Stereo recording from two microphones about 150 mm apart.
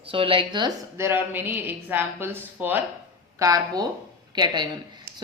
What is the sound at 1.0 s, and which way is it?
Speech, 15° right (ahead or behind).